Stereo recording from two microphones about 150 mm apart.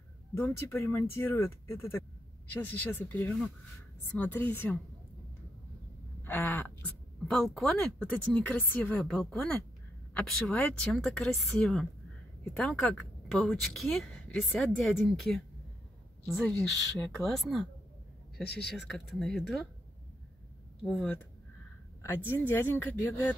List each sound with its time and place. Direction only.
0.3 s speech: 15° left (ahead or behind)
6.2 s speech: 15° left (ahead or behind)
7.2 s a woman's voice: centre (ahead or behind)
17.2 s a woman's voice: centre (ahead or behind)
18.7 s a woman's voice: 5° left (ahead or behind)
20.8 s speech: 10° left (ahead or behind)